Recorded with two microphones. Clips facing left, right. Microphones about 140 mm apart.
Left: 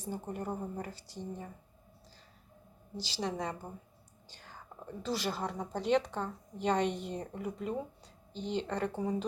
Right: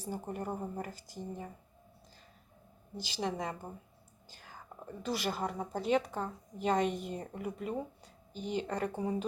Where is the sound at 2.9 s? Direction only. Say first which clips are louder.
Left 1 dB; 35° left (ahead or behind).